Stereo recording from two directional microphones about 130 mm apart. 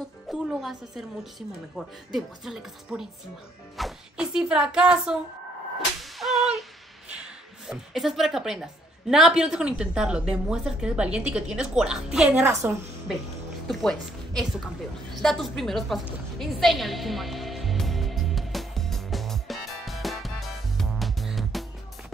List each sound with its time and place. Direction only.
0.3 s a woman's voice: 5° right (ahead or behind)
6.1 s whip: centre (ahead or behind)
7.1 s a woman's voice: 5° right (ahead or behind)
13.7 s a woman's voice: centre (ahead or behind)
16.3 s music: centre (ahead or behind)